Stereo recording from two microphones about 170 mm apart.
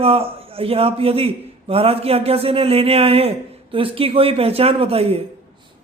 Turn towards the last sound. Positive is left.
turn(degrees=-35)  # may be behind; listen again after turning